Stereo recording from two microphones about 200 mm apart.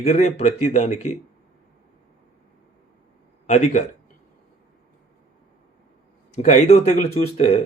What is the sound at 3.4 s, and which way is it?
Speech, 35° left (ahead or behind).